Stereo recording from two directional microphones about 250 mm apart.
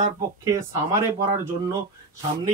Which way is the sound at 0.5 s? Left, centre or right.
Centre.